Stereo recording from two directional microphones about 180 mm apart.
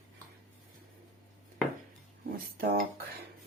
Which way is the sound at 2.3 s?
55° right (ahead or behind).